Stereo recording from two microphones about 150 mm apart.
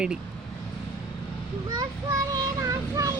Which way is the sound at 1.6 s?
25° right (ahead or behind).